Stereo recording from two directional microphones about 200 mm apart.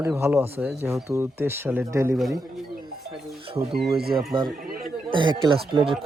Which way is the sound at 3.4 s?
25° right (ahead or behind).